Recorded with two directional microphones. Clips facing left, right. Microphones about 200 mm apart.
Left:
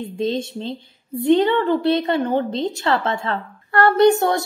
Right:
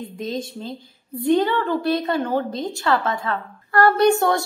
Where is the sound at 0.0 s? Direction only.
25° left (ahead or behind).